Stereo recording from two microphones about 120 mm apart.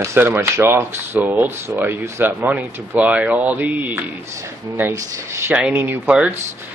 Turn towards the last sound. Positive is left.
turn(degrees=-15)  # may be behind; listen again after turning